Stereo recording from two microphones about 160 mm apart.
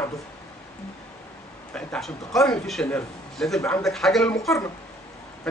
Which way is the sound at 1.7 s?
5° left (ahead or behind).